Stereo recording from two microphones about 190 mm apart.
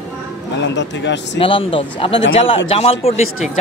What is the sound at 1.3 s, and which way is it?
Speech, 25° left (ahead or behind).